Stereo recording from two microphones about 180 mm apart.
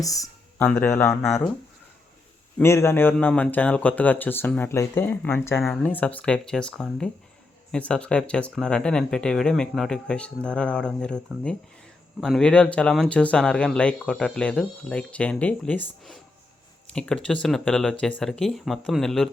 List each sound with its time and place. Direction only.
0.0 s a sound: 20° left (ahead or behind)
0.7 s speech: 10° left (ahead or behind)
2.6 s speech: 15° left (ahead or behind)
12.2 s speech: 5° left (ahead or behind)